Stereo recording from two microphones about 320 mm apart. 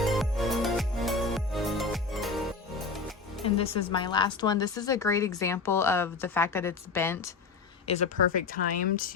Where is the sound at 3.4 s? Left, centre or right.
Centre.